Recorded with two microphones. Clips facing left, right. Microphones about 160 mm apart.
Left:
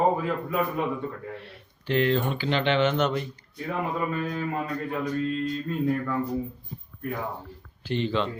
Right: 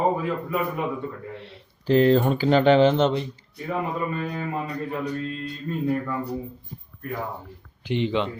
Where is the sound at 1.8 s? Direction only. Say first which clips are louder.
Right 6 dB; 35° right (ahead or behind).